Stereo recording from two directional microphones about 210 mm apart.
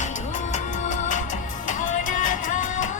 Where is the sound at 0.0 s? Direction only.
35° left (ahead or behind).